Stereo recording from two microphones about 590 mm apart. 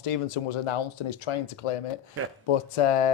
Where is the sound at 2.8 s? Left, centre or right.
Left.